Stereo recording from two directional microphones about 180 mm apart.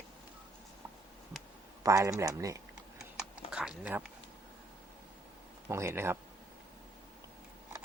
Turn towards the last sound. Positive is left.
turn(degrees=-15)  # may be behind; listen again after turning